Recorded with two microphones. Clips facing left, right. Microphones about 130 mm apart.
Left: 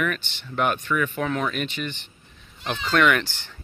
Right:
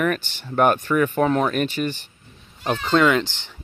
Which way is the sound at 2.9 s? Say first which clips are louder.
Right 2 dB; 20° right (ahead or behind).